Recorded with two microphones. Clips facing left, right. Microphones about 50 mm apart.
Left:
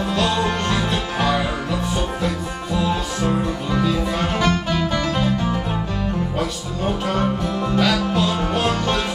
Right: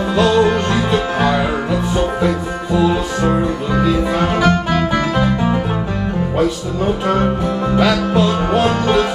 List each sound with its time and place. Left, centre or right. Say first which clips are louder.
0.1 s music: right 9 dB; centre
3.2 s music: right 5 dB; right
3.8 s music: right 6 dB; centre
7.1 s music: right 5 dB; centre